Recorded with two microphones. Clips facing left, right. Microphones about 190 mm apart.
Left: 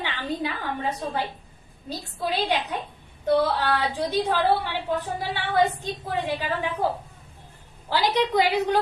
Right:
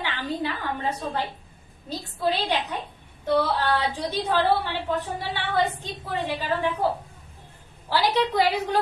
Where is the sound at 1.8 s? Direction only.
10° left (ahead or behind).